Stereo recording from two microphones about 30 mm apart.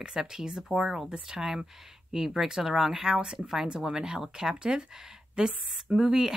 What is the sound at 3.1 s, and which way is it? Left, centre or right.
Speech, right.